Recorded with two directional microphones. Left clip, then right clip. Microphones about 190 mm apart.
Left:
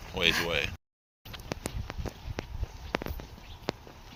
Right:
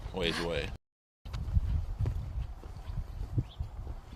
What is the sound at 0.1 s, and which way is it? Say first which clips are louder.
Speech: left 7 dB; 30° right (ahead or behind).